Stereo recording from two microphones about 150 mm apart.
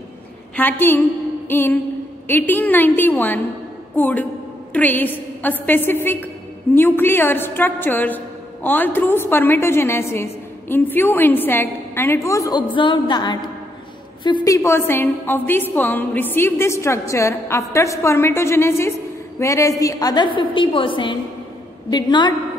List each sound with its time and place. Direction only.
0.6 s a woman's voice: 15° left (ahead or behind); by 22.3 s 30° left (ahead or behind)